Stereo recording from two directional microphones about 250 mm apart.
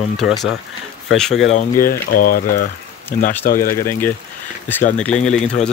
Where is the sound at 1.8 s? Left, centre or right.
Left.